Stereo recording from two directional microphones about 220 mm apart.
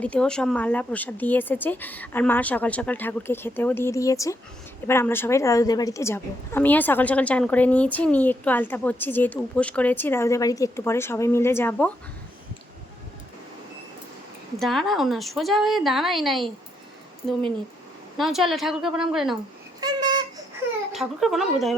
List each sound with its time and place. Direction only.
0.0 s a woman's voice: 5° left (ahead or behind)
14.6 s a woman's voice: centre (ahead or behind)
18.2 s a woman's voice: centre (ahead or behind)
19.8 s a sound: 20° right (ahead or behind)
20.9 s a woman's voice: centre (ahead or behind)